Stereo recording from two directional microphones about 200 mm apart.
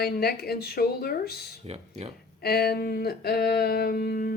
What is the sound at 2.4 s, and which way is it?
Speech, 50° left (ahead or behind).